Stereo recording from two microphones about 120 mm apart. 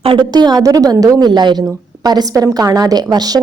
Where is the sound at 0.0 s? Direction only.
45° right (ahead or behind).